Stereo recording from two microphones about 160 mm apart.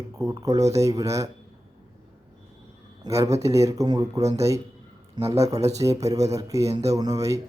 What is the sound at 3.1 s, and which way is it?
Speech, 20° right (ahead or behind).